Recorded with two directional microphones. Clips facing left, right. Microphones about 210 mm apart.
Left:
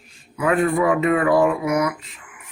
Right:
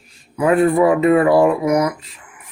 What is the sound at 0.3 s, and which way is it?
Speech, 35° right (ahead or behind).